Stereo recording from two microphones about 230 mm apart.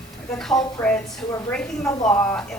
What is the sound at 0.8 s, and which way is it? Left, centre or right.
Speech, centre.